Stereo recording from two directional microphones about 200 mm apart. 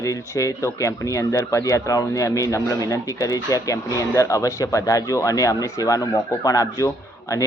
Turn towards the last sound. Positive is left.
turn(degrees=15)  # may be behind; listen again after turning